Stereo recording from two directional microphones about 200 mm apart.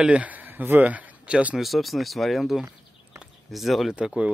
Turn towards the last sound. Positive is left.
turn(degrees=-5)  # may be behind; listen again after turning